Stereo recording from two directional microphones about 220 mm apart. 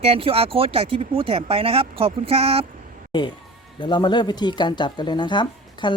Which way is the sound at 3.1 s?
20° left (ahead or behind).